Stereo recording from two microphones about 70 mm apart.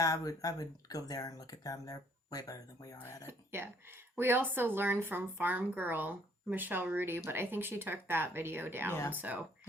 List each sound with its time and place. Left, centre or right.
0.0 s speech: left
3.2 s speech: right
8.9 s speech: left
9.1 s speech: right